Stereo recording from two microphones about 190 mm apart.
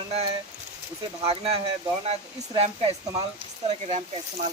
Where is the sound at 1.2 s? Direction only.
30° right (ahead or behind).